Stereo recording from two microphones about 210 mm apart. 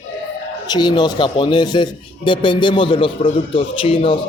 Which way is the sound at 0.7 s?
20° left (ahead or behind).